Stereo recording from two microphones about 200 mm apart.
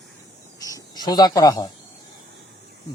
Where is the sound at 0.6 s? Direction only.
15° left (ahead or behind).